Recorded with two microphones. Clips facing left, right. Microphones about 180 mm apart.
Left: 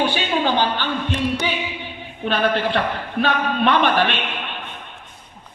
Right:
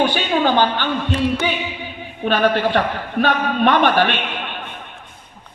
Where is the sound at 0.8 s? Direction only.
50° right (ahead or behind).